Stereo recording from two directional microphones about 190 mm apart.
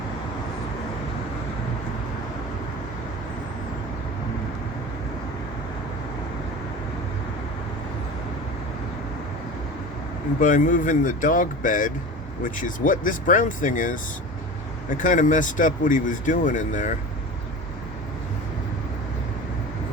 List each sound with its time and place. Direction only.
10.4 s speech: 45° left (ahead or behind)